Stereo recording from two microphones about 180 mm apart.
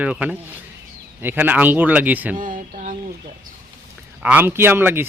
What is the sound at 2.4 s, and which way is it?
Speech, 50° right (ahead or behind).